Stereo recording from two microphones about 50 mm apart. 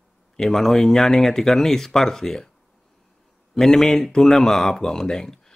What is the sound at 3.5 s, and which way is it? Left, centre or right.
Speech, centre.